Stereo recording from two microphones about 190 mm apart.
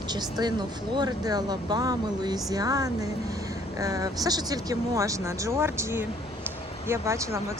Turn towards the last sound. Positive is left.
turn(degrees=-15)  # may be behind; listen again after turning